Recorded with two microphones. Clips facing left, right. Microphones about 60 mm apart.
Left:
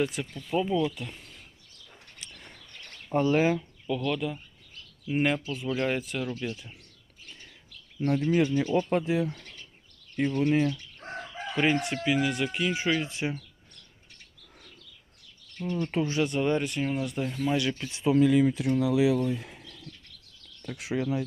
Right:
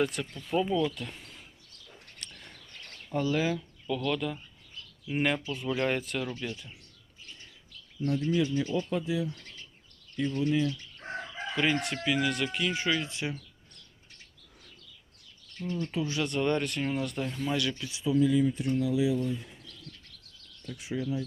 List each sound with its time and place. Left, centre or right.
0.0 s speech: centre
2.1 s a sound: centre
3.1 s speech: left
3.8 s speech: centre
7.9 s speech: left
10.3 s speech: left
11.5 s speech: left
15.5 s speech: left
16.2 s speech: centre
17.4 s speech: left
17.7 s speech: left
18.1 s speech: left